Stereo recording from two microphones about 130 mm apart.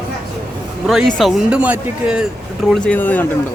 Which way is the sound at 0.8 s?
Centre (ahead or behind).